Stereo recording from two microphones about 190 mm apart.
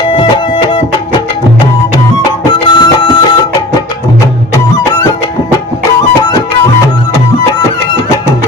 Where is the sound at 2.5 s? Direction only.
25° left (ahead or behind).